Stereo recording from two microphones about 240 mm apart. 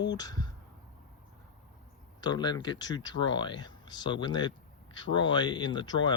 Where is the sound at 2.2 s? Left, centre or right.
Centre.